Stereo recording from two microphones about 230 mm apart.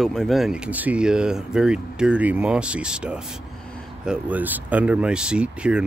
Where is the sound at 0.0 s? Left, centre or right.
Centre.